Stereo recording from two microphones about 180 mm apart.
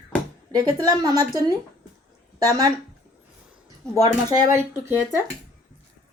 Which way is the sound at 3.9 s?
20° right (ahead or behind).